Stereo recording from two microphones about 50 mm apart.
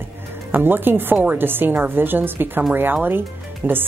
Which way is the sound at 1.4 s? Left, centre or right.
Right.